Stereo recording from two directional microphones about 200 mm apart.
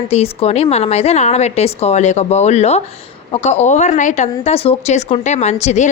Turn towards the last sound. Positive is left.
turn(degrees=35)  # may be behind; listen again after turning